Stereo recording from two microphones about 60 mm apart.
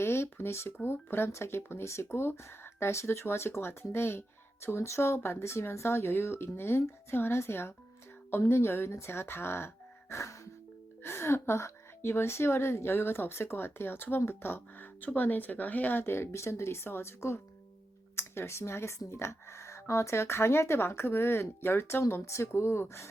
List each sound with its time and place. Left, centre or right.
0.0 s a woman's voice: left
11.0 s a woman's voice: left